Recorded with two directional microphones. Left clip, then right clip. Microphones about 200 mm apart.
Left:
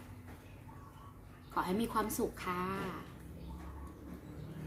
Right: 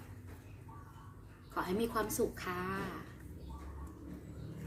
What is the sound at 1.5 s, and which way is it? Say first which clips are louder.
A woman's voice: left 1 dB; 15° left (ahead or behind).